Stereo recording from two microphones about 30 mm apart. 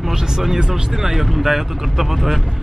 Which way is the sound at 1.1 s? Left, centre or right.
Centre.